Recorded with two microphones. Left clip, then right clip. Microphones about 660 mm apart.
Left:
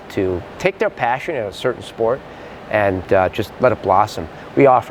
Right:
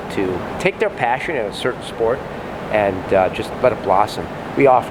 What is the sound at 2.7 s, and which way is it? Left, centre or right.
Speech, left.